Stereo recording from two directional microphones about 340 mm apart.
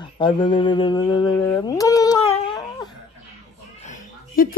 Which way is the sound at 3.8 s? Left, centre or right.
Left.